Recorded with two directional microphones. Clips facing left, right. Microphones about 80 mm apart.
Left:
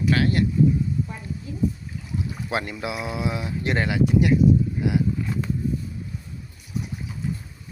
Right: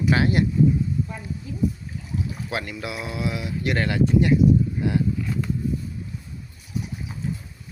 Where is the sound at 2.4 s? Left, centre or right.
Left.